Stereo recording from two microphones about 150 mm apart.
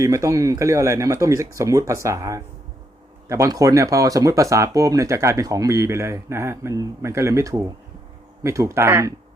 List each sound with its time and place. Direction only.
0.0 s speech: 20° right (ahead or behind)